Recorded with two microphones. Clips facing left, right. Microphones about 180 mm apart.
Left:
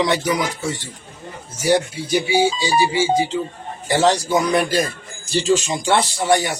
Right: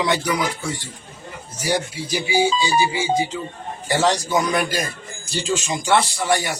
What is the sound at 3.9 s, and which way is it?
Music, 25° left (ahead or behind).